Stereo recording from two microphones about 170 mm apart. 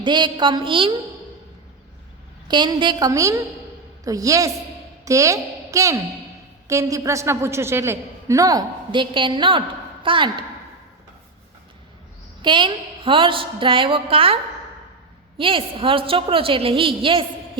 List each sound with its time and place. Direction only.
0.0 s a woman's voice: 25° right (ahead or behind)
2.5 s a woman's voice: 25° right (ahead or behind)
12.4 s a woman's voice: 30° right (ahead or behind)
15.4 s a woman's voice: 30° right (ahead or behind)